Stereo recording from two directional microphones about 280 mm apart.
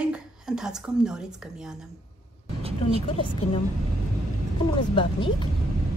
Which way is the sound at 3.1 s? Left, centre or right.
Centre.